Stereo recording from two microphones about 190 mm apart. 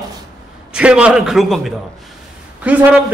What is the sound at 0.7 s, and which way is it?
A man's voice, 5° right (ahead or behind).